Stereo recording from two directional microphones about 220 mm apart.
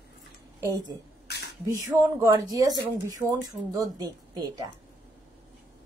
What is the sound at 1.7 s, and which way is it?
Speech, 15° right (ahead or behind).